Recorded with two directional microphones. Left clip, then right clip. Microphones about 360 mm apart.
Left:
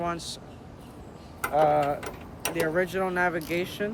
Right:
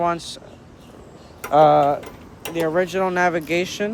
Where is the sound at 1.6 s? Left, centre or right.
Centre.